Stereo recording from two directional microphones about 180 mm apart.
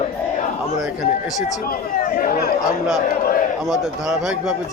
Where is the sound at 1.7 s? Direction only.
50° left (ahead or behind).